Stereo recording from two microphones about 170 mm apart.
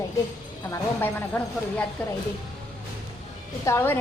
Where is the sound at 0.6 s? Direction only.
15° left (ahead or behind).